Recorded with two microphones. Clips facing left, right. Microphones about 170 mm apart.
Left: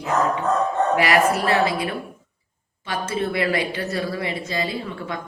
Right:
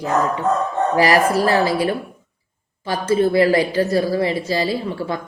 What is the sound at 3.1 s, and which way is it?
A woman's voice, 35° right (ahead or behind).